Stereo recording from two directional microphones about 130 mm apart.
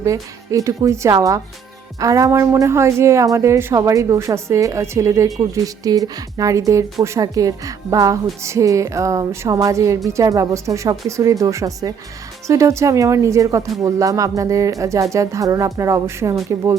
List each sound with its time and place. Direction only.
0.0 s a woman's voice: 25° right (ahead or behind)